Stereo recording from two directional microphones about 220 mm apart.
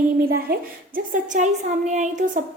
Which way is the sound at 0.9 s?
35° right (ahead or behind).